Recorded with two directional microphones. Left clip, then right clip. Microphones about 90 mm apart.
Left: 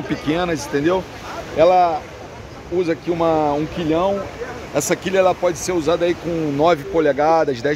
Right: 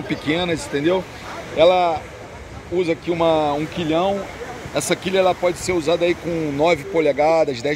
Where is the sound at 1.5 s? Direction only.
25° left (ahead or behind).